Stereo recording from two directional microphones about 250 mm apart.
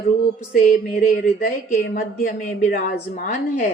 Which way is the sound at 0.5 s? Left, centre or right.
Left.